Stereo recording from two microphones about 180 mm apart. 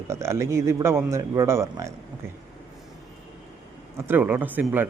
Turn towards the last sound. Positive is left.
turn(degrees=-10)  # may be behind; listen again after turning